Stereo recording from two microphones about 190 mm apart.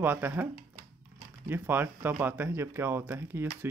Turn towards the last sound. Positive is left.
turn(degrees=-10)  # may be behind; listen again after turning